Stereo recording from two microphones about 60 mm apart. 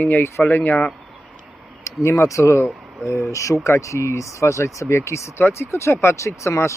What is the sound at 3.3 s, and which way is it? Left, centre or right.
Speech, left.